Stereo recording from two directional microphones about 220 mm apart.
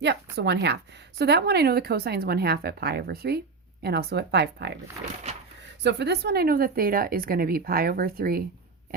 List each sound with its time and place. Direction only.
0.3 s speech: 50° right (ahead or behind)
5.8 s speech: 50° right (ahead or behind)